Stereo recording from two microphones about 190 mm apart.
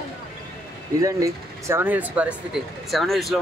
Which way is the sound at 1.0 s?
15° right (ahead or behind).